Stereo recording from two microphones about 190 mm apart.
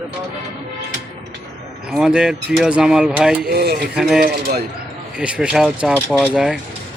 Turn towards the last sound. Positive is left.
turn(degrees=-5)  # may be behind; listen again after turning